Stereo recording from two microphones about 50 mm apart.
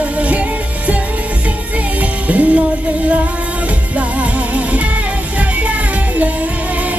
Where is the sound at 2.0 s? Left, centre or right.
Right.